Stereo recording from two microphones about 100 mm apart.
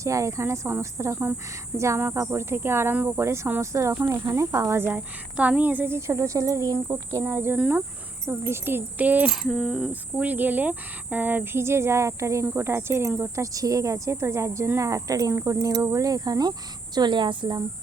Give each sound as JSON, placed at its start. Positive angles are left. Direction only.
{"t": 0.0, "sound": "speech", "side_deg": -30}
{"t": 4.9, "sound": "speech", "side_deg": -15}
{"t": 9.3, "sound": "speech", "side_deg": 0}